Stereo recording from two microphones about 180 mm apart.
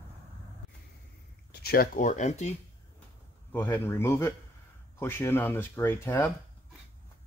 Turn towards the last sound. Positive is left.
turn(degrees=15)  # may be behind; listen again after turning